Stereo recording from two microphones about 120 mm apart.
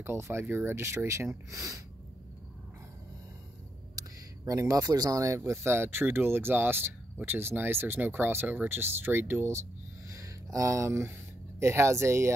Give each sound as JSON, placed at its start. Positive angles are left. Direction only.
{"t": 0.0, "sound": "speech", "side_deg": -20}
{"t": 4.0, "sound": "a sound", "side_deg": -30}
{"t": 4.5, "sound": "speech", "side_deg": -30}